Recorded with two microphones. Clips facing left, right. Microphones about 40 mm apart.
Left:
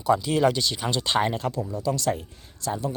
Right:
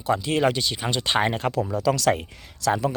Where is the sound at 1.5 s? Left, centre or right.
Right.